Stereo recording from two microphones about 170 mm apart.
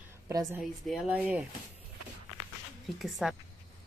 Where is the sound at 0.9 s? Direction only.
5° right (ahead or behind).